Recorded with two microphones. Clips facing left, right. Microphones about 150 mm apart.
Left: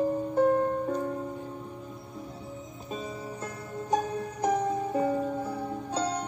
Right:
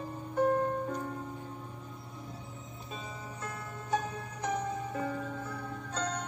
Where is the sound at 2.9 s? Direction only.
35° left (ahead or behind).